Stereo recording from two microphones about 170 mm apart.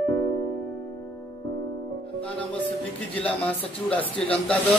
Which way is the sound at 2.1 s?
10° left (ahead or behind).